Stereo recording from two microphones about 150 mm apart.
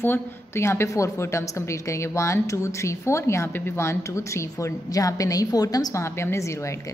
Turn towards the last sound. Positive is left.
turn(degrees=20)  # may be behind; listen again after turning